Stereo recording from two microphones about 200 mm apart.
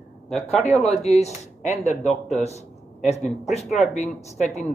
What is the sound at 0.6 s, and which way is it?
Speech, 30° left (ahead or behind).